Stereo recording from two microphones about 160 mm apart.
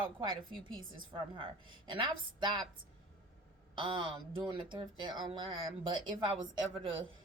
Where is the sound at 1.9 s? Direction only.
30° right (ahead or behind).